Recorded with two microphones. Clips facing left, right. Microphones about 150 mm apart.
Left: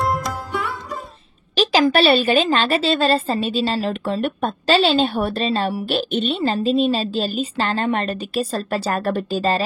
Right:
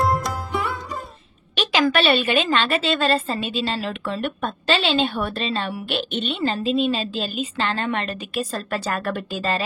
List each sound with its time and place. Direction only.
0.0 s music: centre (ahead or behind)
1.5 s a woman's voice: 35° left (ahead or behind)